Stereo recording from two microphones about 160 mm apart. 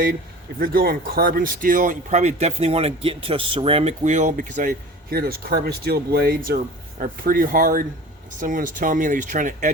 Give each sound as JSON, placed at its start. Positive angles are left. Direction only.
{"t": 0.6, "sound": "speech", "side_deg": -65}
{"t": 5.1, "sound": "speech", "side_deg": -70}